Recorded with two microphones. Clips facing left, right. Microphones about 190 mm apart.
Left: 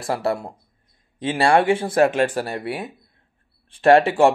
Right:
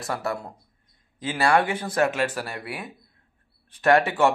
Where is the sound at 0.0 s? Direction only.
30° left (ahead or behind).